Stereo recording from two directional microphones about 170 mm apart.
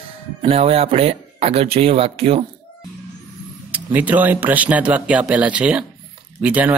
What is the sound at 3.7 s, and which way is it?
Speech, 10° right (ahead or behind).